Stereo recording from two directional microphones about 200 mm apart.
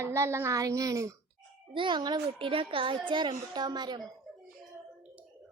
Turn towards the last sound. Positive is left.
turn(degrees=-20)  # may be behind; listen again after turning